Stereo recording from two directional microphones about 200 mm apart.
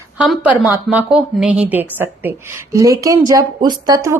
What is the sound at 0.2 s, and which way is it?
Speech, 5° right (ahead or behind).